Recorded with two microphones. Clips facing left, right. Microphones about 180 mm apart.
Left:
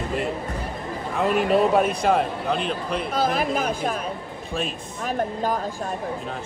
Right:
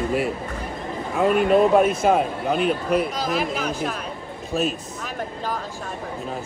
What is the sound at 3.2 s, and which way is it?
Speech, 50° left (ahead or behind).